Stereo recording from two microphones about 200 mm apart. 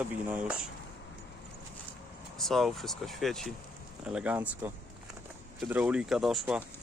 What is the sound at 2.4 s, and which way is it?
Speech, centre (ahead or behind).